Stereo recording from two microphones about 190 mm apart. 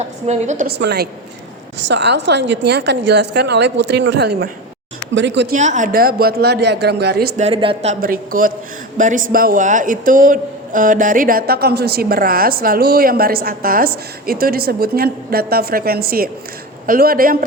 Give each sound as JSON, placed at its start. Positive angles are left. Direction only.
{"t": 0.0, "sound": "a woman's voice", "side_deg": -35}
{"t": 0.8, "sound": "a woman's voice", "side_deg": -60}
{"t": 5.1, "sound": "speech", "side_deg": -70}
{"t": 5.5, "sound": "a man's voice", "side_deg": -40}
{"t": 7.3, "sound": "a woman's voice", "side_deg": -30}
{"t": 8.0, "sound": "a man's voice", "side_deg": -50}